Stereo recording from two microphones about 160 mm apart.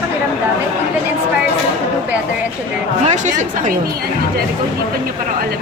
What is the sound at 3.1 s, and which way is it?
Speech, 50° right (ahead or behind).